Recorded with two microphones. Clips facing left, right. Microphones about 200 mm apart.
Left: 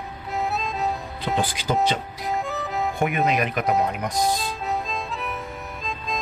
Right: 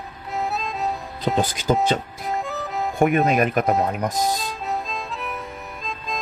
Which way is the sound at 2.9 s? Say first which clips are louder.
Right 6 dB; 45° right (ahead or behind).